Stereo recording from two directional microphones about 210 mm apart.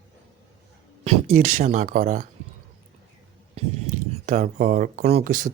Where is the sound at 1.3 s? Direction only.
35° right (ahead or behind).